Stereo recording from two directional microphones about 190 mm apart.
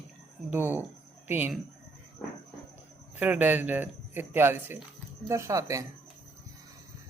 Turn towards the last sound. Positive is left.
turn(degrees=-15)  # may be behind; listen again after turning